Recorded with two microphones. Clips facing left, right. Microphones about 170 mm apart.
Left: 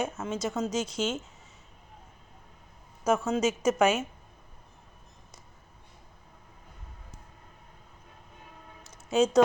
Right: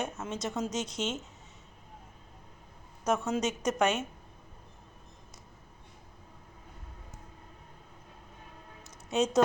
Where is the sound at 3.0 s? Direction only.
Centre (ahead or behind).